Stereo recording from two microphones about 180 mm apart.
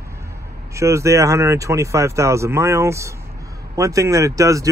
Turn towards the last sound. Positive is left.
turn(degrees=-20)  # may be behind; listen again after turning